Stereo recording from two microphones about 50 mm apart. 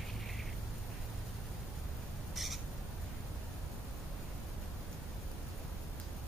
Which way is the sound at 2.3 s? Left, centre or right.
Centre.